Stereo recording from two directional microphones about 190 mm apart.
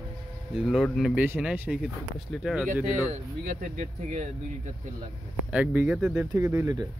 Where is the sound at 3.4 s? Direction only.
45° right (ahead or behind).